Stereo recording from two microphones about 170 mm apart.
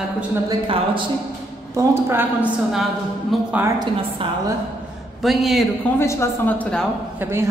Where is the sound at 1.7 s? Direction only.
15° right (ahead or behind).